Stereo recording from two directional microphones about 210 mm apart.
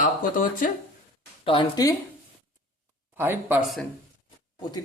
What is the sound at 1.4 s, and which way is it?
Speech, 25° left (ahead or behind).